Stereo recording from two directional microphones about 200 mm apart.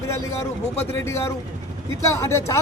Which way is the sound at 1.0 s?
15° left (ahead or behind).